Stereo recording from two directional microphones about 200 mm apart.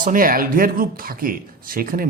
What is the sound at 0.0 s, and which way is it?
Speech, 45° right (ahead or behind).